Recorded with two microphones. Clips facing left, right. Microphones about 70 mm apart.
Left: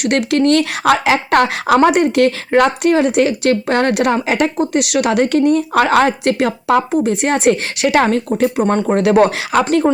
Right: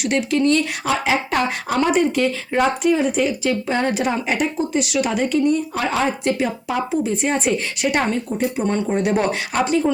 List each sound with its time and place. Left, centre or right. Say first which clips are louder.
0.0 s speech: left 4 dB; left
4.5 s speech: left 5 dB; left